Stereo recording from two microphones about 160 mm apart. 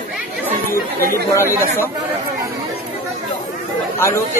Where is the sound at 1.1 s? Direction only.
15° left (ahead or behind).